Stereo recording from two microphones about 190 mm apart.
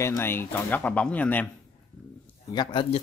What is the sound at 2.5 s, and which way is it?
Speech, 25° left (ahead or behind).